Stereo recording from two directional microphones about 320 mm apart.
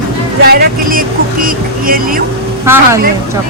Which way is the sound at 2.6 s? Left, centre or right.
Centre.